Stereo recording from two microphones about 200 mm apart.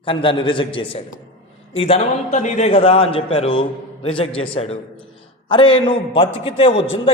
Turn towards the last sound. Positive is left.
turn(degrees=25)  # may be behind; listen again after turning